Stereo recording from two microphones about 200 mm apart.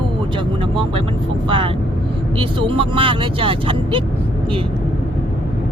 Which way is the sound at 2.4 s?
25° right (ahead or behind).